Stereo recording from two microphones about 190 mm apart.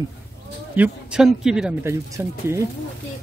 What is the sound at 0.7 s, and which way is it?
Speech, 5° right (ahead or behind).